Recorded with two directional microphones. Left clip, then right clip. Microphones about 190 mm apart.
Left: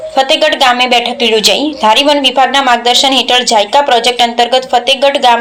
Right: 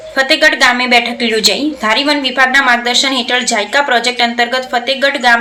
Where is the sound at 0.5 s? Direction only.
Centre (ahead or behind).